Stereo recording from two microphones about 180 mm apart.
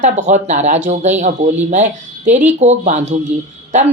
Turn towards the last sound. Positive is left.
turn(degrees=-40)  # may be behind; listen again after turning